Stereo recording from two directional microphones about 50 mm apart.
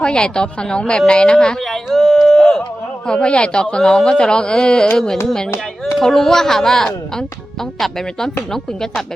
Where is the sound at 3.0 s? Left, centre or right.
Centre.